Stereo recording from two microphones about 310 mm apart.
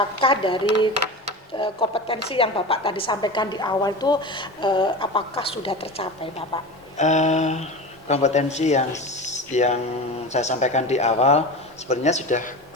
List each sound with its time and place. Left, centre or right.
0.2 s a woman's voice: centre
9.2 s a sound: left
10.3 s speech: left